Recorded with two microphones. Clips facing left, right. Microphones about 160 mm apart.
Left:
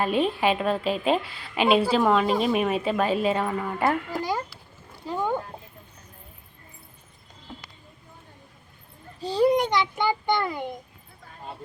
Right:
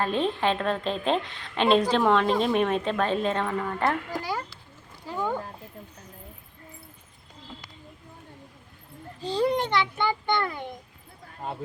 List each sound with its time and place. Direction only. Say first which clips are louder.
0.0 s a woman's voice: left 2 dB; 10° left (ahead or behind)
5.0 s a sound: left 4 dB; 20° left (ahead or behind)
9.2 s a woman's voice: left 4 dB; 10° left (ahead or behind)